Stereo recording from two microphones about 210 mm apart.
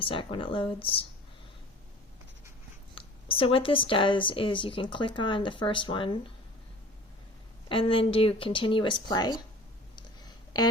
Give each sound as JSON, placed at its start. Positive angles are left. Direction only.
{"t": 0.0, "sound": "speech", "side_deg": 25}
{"t": 2.9, "sound": "speech", "side_deg": 25}
{"t": 7.7, "sound": "speech", "side_deg": 25}
{"t": 9.9, "sound": "a sound", "side_deg": 20}